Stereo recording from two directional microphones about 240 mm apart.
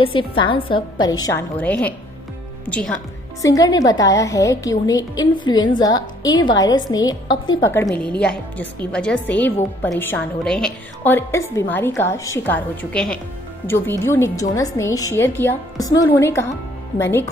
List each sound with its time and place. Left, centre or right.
0.0 s a woman's voice: left
7.7 s a woman's voice: centre